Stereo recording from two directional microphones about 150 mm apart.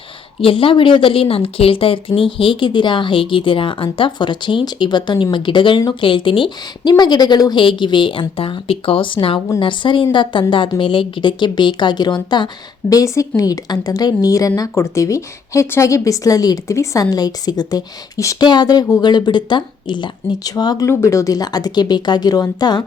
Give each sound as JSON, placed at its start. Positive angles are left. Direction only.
{"t": 0.4, "sound": "a woman's voice", "side_deg": 35}